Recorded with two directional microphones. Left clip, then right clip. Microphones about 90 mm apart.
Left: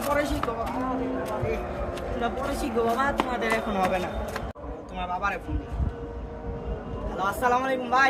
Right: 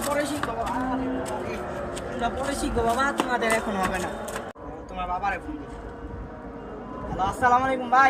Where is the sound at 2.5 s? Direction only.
20° left (ahead or behind).